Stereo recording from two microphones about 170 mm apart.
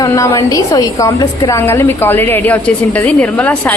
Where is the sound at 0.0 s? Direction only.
15° left (ahead or behind).